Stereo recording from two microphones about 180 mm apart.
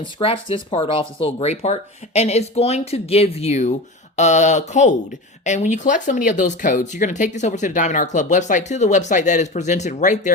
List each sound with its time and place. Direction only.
0.0 s speech: 30° left (ahead or behind)